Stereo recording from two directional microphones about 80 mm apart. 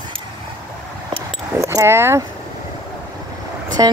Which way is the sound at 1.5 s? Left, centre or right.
Right.